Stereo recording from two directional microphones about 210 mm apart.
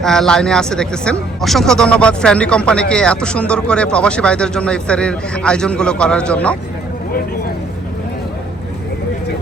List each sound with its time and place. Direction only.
0.0 s speech: centre (ahead or behind)